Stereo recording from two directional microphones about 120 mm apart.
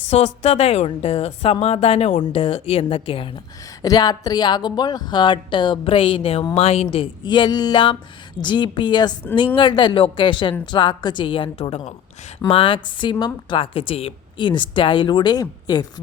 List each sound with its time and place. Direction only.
0.1 s a woman's voice: 65° left (ahead or behind)
2.3 s speech: 50° left (ahead or behind)
3.8 s a woman's voice: 35° left (ahead or behind)